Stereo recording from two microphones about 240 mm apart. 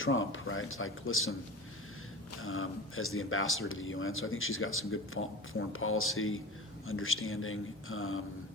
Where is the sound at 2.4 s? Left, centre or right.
Left.